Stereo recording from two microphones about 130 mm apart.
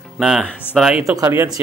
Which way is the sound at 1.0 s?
20° right (ahead or behind).